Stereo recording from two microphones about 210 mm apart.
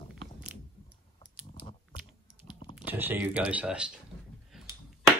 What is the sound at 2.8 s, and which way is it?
Speech, 10° right (ahead or behind).